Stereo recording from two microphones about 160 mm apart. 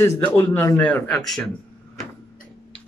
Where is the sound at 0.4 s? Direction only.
10° left (ahead or behind).